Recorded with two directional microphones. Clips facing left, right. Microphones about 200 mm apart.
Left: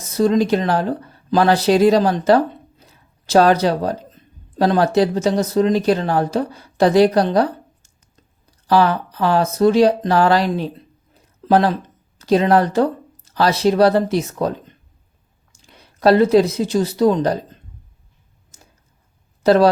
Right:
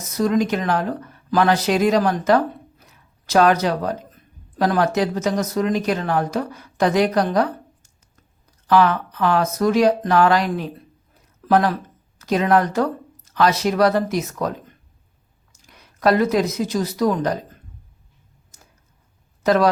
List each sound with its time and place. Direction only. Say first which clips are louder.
0.0 s speech: left 3 dB; 30° left (ahead or behind)
19.4 s speech: left 4 dB; 30° left (ahead or behind)